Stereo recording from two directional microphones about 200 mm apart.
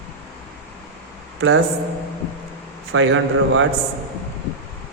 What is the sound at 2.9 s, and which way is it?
Speech, 75° right (ahead or behind).